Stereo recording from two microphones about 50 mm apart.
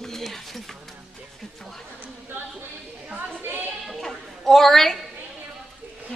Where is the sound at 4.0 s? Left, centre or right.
Centre.